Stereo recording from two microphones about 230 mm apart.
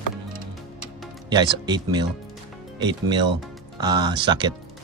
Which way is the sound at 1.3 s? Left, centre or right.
Centre.